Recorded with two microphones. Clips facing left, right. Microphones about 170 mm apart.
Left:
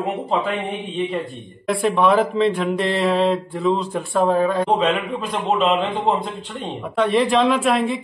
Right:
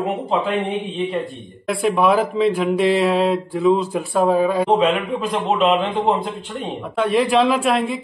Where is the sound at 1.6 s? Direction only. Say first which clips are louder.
Even; centre (ahead or behind).